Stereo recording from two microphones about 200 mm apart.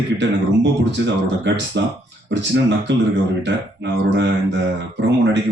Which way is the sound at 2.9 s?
60° right (ahead or behind).